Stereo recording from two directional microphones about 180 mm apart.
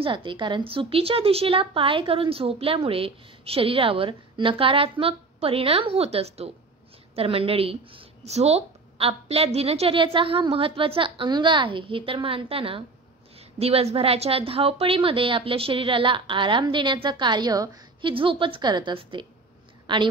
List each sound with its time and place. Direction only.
0.0 s a woman's voice: 25° right (ahead or behind)